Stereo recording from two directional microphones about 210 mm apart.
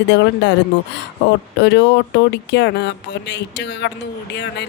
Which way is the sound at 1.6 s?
55° left (ahead or behind).